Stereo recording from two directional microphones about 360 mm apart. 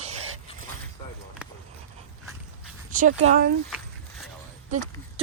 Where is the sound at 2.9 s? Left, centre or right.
Right.